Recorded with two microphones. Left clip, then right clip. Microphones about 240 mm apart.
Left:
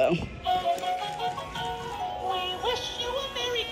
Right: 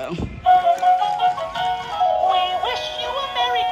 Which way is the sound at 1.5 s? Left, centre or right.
Centre.